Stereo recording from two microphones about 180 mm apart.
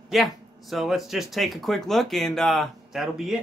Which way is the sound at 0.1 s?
Centre (ahead or behind).